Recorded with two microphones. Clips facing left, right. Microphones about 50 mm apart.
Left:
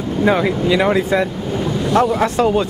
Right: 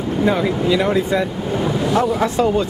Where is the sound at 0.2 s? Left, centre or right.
Left.